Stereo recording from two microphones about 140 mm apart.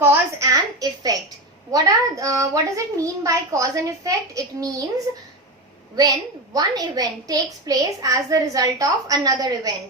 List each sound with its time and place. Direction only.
0.0 s a woman's voice: 20° right (ahead or behind)
6.5 s a child's voice: 25° right (ahead or behind)